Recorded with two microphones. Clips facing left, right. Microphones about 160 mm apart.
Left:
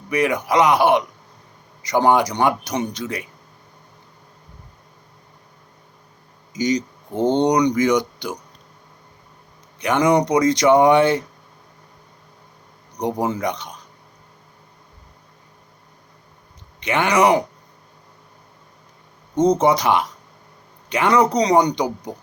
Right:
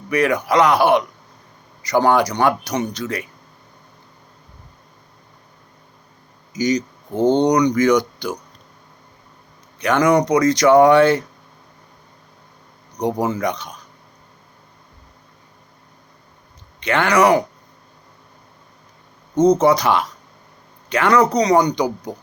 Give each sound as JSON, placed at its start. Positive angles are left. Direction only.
{"t": 0.1, "sound": "speech", "side_deg": 20}
{"t": 6.6, "sound": "speech", "side_deg": 25}
{"t": 7.2, "sound": "speech", "side_deg": -10}
{"t": 7.4, "sound": "speech", "side_deg": 25}
{"t": 9.8, "sound": "speech", "side_deg": 20}
{"t": 13.0, "sound": "speech", "side_deg": 20}
{"t": 16.8, "sound": "speech", "side_deg": 15}
{"t": 19.3, "sound": "speech", "side_deg": -10}
{"t": 19.5, "sound": "speech", "side_deg": 20}